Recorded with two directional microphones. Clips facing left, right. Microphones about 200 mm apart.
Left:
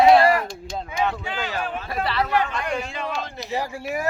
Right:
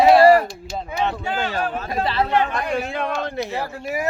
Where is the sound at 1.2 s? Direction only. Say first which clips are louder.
Right 4 dB; 45° right (ahead or behind).